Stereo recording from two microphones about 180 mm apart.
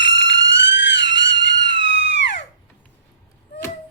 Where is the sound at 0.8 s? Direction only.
80° left.